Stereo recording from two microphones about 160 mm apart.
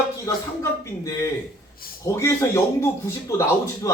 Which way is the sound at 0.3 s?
20° left (ahead or behind).